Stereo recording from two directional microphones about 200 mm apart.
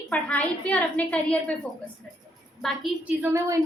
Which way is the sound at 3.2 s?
15° right (ahead or behind).